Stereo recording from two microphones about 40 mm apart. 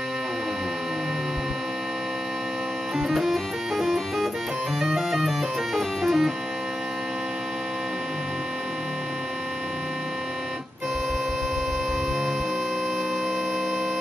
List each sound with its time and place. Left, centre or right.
3.0 s music: centre